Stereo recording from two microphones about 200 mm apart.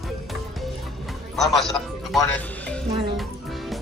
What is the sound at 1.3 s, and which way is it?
Music, centre (ahead or behind).